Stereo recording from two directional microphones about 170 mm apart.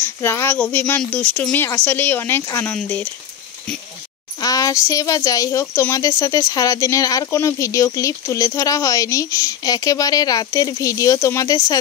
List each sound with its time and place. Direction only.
0.0 s speech: 15° left (ahead or behind)
4.4 s speech: 20° left (ahead or behind)